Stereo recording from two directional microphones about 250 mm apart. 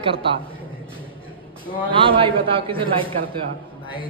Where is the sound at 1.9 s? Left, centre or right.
Centre.